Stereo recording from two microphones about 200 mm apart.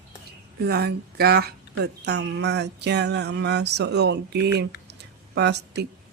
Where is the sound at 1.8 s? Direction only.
60° right (ahead or behind).